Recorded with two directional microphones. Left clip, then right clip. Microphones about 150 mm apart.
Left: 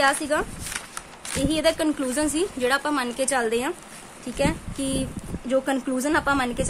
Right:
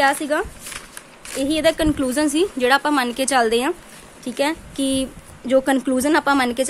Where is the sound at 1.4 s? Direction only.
30° right (ahead or behind).